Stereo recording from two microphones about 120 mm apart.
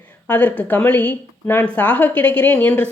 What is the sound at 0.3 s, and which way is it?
Speech, 15° left (ahead or behind).